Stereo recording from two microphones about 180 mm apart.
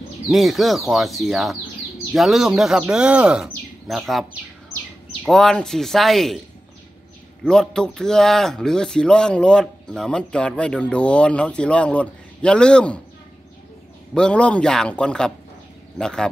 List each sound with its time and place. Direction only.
0.3 s speech: centre (ahead or behind)
7.4 s speech: 5° left (ahead or behind)
14.1 s speech: 5° left (ahead or behind)